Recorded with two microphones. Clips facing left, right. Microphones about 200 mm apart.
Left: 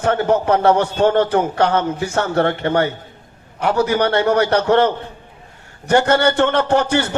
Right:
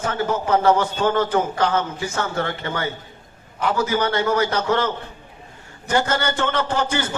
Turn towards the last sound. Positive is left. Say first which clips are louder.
# left 6 dB
turn(degrees=65)  # may be behind; listen again after turning